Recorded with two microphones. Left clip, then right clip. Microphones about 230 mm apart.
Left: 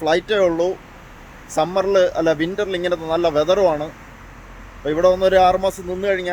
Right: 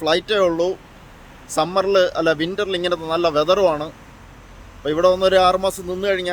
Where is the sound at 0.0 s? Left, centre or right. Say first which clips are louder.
Left 1 dB; centre.